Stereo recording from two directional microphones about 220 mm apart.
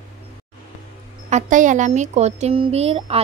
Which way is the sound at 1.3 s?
35° right (ahead or behind).